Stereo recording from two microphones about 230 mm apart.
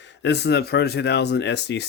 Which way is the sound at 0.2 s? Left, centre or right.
Left.